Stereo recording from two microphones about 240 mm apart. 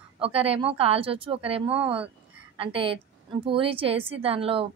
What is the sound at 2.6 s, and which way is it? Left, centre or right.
A woman's voice, right.